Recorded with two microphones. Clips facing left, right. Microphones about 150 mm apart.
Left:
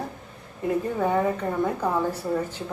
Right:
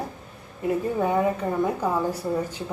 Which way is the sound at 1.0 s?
10° right (ahead or behind).